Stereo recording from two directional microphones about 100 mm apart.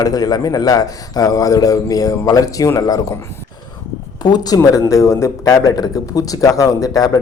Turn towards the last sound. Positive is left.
turn(degrees=40)  # may be behind; listen again after turning